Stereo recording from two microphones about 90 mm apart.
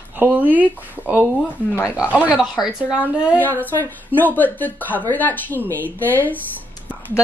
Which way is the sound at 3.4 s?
20° left (ahead or behind).